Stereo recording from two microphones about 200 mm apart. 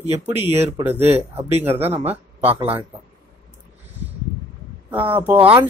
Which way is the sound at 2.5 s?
30° right (ahead or behind).